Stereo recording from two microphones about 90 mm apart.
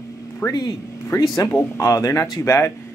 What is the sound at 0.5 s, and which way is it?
Speech, 50° left (ahead or behind).